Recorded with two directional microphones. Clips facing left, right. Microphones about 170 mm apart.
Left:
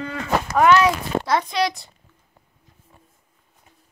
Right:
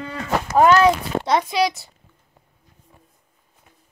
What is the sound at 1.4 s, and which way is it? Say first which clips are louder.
Speech: right 2 dB; 5° right (ahead or behind).